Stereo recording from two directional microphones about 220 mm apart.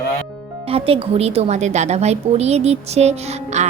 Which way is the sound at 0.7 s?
25° right (ahead or behind).